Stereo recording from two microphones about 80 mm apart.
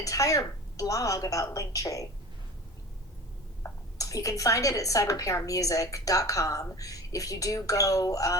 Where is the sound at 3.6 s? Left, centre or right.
Left.